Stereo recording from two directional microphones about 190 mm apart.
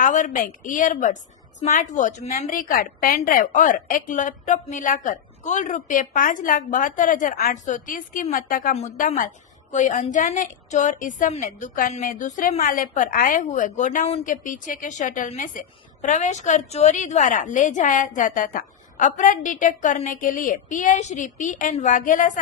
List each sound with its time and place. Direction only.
0.0 s a woman's voice: 40° left (ahead or behind)